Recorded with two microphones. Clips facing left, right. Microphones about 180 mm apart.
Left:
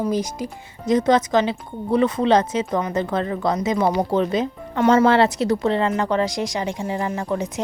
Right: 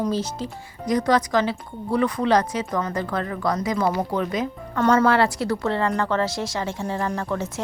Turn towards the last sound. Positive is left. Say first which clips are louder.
# left 2 dB
turn(degrees=15)  # may be behind; listen again after turning